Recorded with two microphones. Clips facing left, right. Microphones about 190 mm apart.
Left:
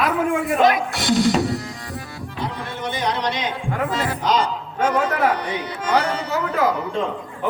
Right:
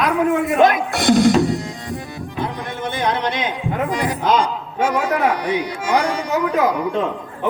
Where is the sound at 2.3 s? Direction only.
50° right (ahead or behind).